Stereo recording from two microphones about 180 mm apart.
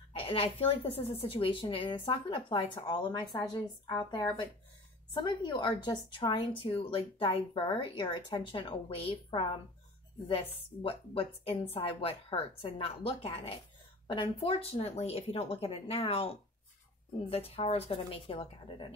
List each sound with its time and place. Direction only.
0.1 s a woman's voice: 30° left (ahead or behind)